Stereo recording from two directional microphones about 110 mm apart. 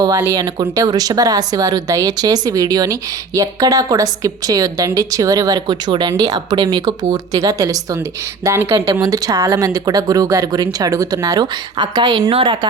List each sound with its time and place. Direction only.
0.3 s speech: 35° right (ahead or behind)